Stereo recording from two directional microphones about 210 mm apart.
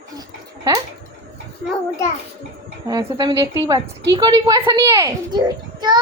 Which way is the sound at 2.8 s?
20° right (ahead or behind).